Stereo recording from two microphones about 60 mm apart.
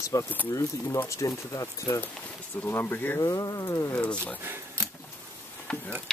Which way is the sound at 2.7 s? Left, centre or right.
Left.